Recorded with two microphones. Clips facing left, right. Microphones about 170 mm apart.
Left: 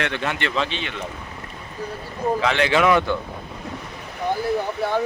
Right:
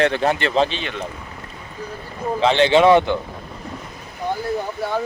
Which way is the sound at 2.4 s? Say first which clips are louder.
Right 6 dB; 30° right (ahead or behind).